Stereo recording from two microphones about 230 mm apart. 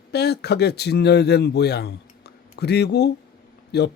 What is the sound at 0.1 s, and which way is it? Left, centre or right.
A man's voice, left.